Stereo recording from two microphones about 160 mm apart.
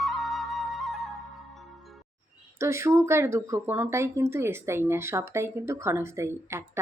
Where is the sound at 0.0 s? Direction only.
Centre (ahead or behind).